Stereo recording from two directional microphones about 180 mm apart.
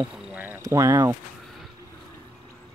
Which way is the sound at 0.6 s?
20° right (ahead or behind).